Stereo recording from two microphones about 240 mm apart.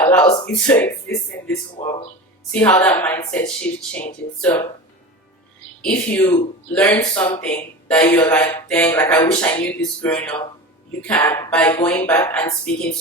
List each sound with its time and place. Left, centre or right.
0.4 s speech: centre
2.5 s speech: centre
5.8 s speech: centre